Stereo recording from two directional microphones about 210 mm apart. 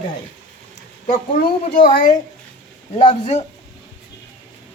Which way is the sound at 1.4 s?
40° left (ahead or behind).